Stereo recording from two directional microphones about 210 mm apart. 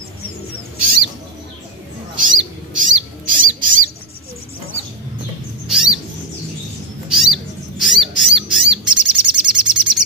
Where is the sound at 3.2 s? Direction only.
40° right (ahead or behind).